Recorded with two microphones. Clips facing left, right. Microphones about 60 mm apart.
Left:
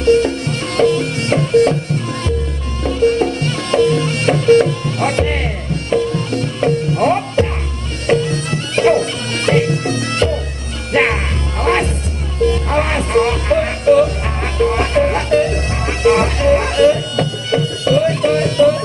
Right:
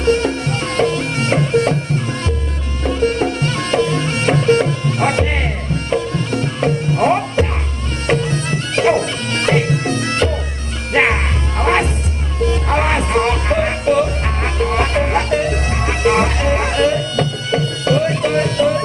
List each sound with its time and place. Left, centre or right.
0.0 s music: right
2.8 s music: centre
8.1 s bagpipes: centre
10.9 s music: centre
12.7 s music: centre